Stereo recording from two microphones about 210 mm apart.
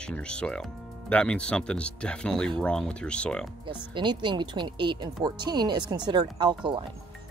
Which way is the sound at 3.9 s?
20° right (ahead or behind).